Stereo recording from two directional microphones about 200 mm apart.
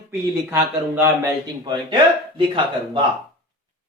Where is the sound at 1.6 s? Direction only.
20° right (ahead or behind).